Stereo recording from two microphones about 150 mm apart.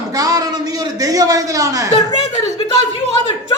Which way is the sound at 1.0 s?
25° right (ahead or behind).